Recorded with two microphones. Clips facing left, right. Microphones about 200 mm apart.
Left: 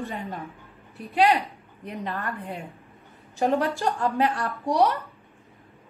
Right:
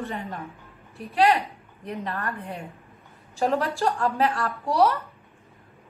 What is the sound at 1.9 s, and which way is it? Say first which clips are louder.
Speech: right 1 dB; 15° left (ahead or behind).